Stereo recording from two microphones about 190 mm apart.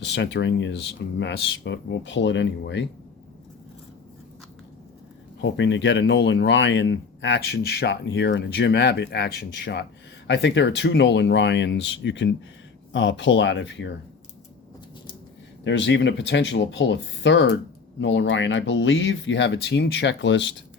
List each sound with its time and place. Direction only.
0.0 s speech: 65° left (ahead or behind)
5.4 s speech: 70° left (ahead or behind)
15.6 s speech: 70° left (ahead or behind)